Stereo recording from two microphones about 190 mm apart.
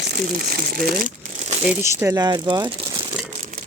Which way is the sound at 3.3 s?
40° right (ahead or behind).